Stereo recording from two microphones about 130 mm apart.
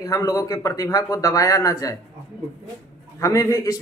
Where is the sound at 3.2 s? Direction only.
25° left (ahead or behind).